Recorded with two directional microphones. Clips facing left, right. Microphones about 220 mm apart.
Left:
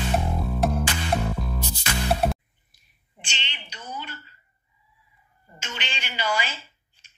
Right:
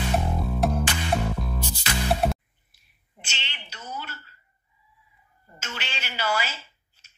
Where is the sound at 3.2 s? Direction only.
5° right (ahead or behind).